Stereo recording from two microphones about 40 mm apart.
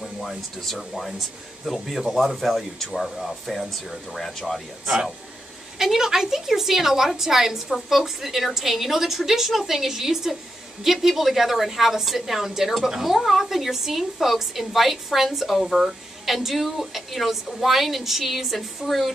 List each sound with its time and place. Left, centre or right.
0.0 s a woman's voice: centre
5.8 s a woman's voice: centre